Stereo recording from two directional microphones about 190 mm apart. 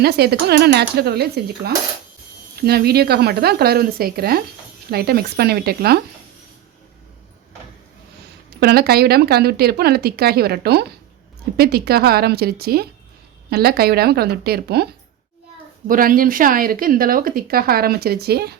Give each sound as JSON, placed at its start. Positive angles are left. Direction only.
{"t": 0.0, "sound": "speech", "side_deg": -60}
{"t": 8.6, "sound": "speech", "side_deg": -55}
{"t": 15.9, "sound": "speech", "side_deg": -50}